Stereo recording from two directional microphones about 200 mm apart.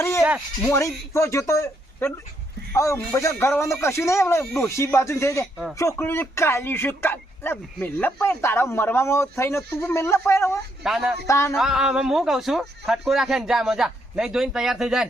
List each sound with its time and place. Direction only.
0.2 s a sound: 5° right (ahead or behind)
0.6 s speech: 15° left (ahead or behind)
10.8 s speech: centre (ahead or behind)
11.3 s speech: 15° left (ahead or behind)
11.5 s speech: centre (ahead or behind)